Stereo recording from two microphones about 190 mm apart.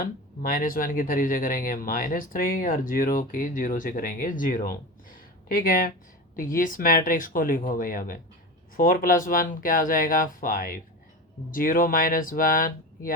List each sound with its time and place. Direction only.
0.0 s speech: 50° left (ahead or behind)
5.1 s a sound: 45° left (ahead or behind)
6.3 s speech: 45° left (ahead or behind)